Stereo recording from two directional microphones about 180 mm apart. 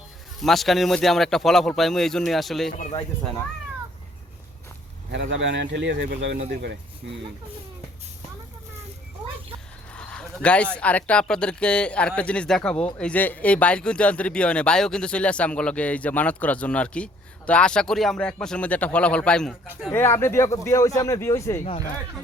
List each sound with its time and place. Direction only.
0.3 s speech: centre (ahead or behind)
5.1 s speech: 85° right
9.9 s a sound: 5° left (ahead or behind)
10.8 s speech: 10° left (ahead or behind)
19.6 s speech: 10° right (ahead or behind)
19.9 s speech: 15° left (ahead or behind)